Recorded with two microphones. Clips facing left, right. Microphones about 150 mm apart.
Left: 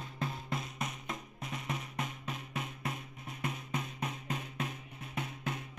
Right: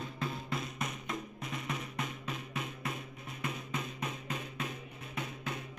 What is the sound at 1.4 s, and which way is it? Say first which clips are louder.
Drum: right 1 dB; 30° left (ahead or behind).